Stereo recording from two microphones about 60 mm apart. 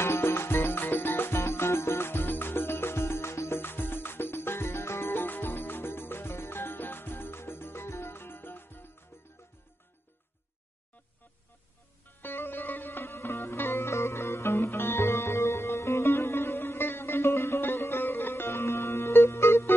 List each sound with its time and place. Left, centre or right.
0.0 s music: left
12.2 s music: left